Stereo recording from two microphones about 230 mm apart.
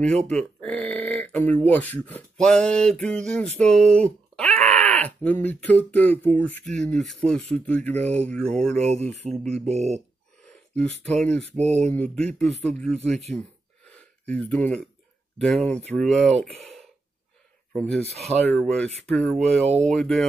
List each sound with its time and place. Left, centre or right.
0.3 s speech: centre
8.8 s speech: right
10.8 s speech: centre
11.5 s speech: right
11.8 s speech: centre
13.8 s a sound: centre
15.3 s speech: centre